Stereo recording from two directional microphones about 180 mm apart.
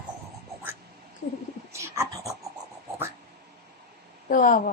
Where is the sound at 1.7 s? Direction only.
15° right (ahead or behind).